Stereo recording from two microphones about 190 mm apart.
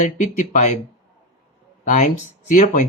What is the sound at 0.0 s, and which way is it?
Speech, 40° left (ahead or behind).